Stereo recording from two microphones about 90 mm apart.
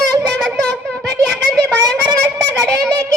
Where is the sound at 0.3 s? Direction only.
5° left (ahead or behind).